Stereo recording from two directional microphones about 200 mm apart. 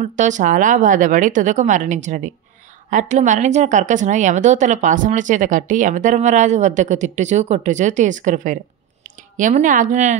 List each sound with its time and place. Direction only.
0.0 s a woman's voice: 35° right (ahead or behind)